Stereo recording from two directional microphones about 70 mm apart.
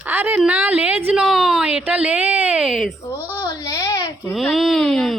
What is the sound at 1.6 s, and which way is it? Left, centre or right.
Speech, centre.